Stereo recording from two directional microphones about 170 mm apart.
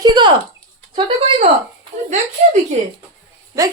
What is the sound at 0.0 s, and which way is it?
Speech, 25° right (ahead or behind).